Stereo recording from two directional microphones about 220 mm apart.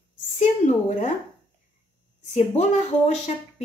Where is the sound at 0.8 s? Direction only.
30° left (ahead or behind).